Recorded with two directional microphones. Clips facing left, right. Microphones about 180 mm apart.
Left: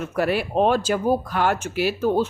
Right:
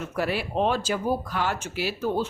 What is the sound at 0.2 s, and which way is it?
Speech, 55° left (ahead or behind).